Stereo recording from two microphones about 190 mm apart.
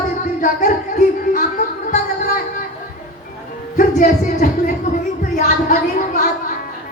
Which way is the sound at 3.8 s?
45° left (ahead or behind).